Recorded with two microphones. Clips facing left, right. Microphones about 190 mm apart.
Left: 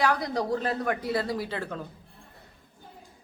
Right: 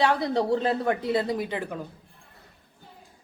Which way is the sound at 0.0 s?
25° right (ahead or behind).